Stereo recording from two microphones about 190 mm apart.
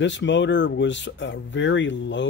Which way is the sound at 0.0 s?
70° left (ahead or behind).